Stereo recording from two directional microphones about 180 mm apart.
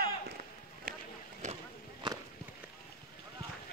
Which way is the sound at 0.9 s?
55° right (ahead or behind).